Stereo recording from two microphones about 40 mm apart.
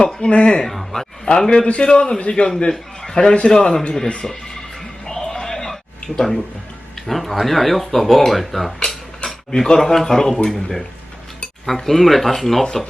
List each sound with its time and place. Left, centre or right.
0.0 s a man's voice: left
0.6 s speech: centre
1.2 s a man's voice: centre
2.6 s a sound: centre
3.2 s a man's voice: left
5.0 s music: centre
6.1 s speech: centre